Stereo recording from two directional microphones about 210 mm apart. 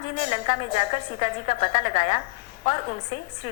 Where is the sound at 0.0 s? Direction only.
30° left (ahead or behind).